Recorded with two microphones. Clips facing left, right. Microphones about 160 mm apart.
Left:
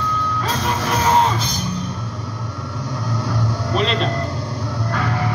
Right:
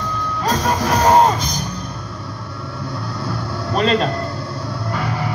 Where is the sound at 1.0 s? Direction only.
40° right (ahead or behind).